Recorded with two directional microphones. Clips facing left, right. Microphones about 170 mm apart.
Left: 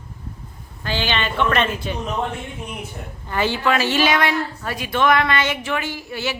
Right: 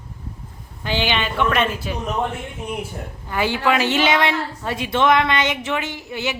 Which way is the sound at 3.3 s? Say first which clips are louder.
Even; 10° right (ahead or behind).